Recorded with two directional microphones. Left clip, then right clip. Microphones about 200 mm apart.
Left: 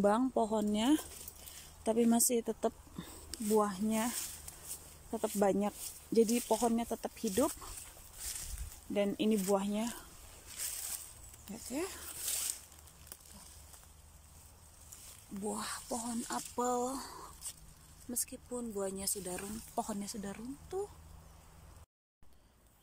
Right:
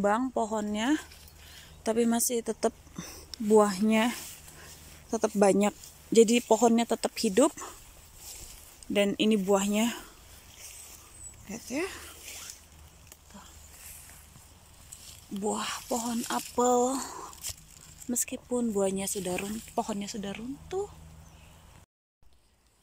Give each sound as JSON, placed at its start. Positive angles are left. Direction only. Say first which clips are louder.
{"t": 0.0, "sound": "speech", "louder": "right 3 dB", "side_deg": 10}
{"t": 3.4, "sound": "speech", "louder": "right 9 dB", "side_deg": -10}
{"t": 8.9, "sound": "speech", "louder": "right 7 dB", "side_deg": 0}
{"t": 11.5, "sound": "speech", "louder": "right 6 dB", "side_deg": 0}
{"t": 15.5, "sound": "speech", "louder": "right 7 dB", "side_deg": -5}
{"t": 15.9, "sound": "speech", "louder": "right 9 dB", "side_deg": -20}
{"t": 16.3, "sound": "speech", "louder": "right 10 dB", "side_deg": -10}